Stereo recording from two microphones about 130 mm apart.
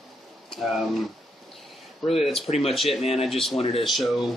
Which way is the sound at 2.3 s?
50° left (ahead or behind).